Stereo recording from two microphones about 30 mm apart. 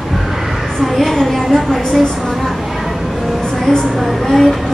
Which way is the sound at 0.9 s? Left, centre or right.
Centre.